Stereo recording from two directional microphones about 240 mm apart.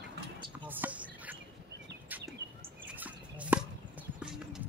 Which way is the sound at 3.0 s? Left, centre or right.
Centre.